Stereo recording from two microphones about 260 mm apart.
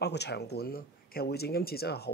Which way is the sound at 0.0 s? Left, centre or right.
Left.